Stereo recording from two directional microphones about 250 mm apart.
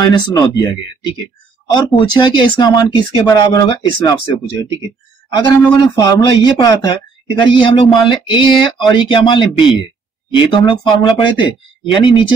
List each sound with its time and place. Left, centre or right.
0.0 s speech: centre
2.1 s speech: centre